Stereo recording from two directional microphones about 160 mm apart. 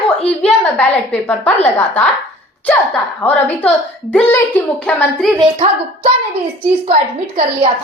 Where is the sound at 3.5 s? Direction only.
10° left (ahead or behind).